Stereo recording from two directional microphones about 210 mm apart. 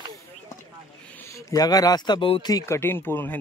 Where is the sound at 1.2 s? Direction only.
15° left (ahead or behind).